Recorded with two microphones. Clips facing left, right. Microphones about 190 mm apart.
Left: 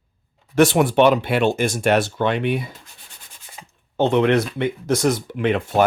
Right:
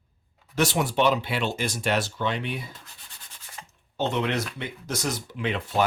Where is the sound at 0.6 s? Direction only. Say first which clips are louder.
Left 9 dB; 55° left (ahead or behind).